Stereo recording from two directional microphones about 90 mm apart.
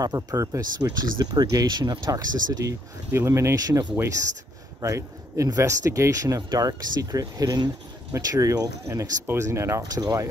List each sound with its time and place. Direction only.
0.0 s speech: 45° right (ahead or behind)
3.1 s speech: 30° right (ahead or behind)
4.8 s speech: 35° right (ahead or behind)
9.2 s speech: 30° right (ahead or behind)
9.8 s speech: 45° right (ahead or behind)